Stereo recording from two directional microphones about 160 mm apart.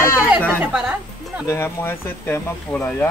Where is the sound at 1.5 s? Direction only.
15° left (ahead or behind).